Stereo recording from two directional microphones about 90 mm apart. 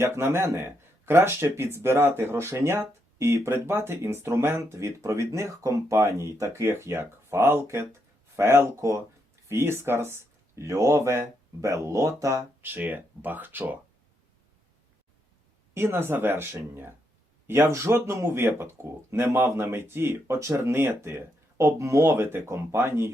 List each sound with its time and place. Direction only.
0.0 s speech: 25° right (ahead or behind)
12.6 s speech: 20° right (ahead or behind)
15.7 s speech: 25° right (ahead or behind)